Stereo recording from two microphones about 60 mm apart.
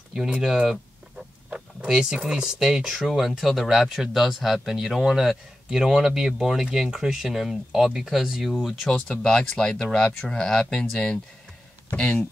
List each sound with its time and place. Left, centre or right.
0.1 s speech: centre
8.8 s speech: centre